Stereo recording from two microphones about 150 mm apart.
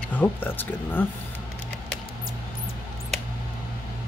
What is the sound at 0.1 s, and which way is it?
Speech, 10° left (ahead or behind).